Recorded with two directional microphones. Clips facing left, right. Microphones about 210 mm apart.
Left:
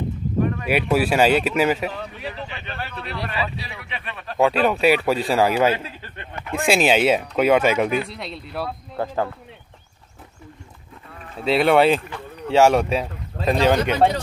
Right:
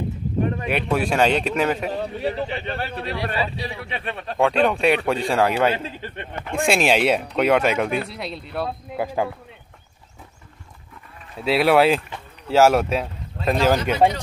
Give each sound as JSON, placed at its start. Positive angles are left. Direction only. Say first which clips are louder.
{"t": 0.7, "sound": "speech", "louder": "left 5 dB", "side_deg": 5}
{"t": 1.9, "sound": "speech", "louder": "right 6 dB", "side_deg": -35}
{"t": 4.4, "sound": "speech", "louder": "left 1 dB", "side_deg": 5}
{"t": 5.9, "sound": "speech", "louder": "right 5 dB", "side_deg": -25}
{"t": 6.5, "sound": "speech", "louder": "left 1 dB", "side_deg": 0}
{"t": 8.9, "sound": "speech", "louder": "even", "side_deg": -10}
{"t": 11.4, "sound": "speech", "louder": "even", "side_deg": 0}